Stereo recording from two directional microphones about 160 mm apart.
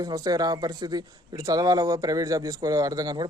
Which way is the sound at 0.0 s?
25° right (ahead or behind).